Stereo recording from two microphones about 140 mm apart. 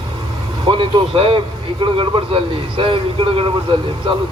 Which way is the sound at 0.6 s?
40° right (ahead or behind).